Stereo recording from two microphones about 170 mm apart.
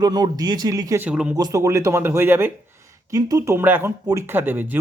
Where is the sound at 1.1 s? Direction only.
5° right (ahead or behind).